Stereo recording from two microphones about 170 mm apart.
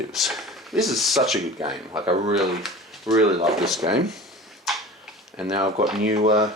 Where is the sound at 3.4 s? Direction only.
Centre (ahead or behind).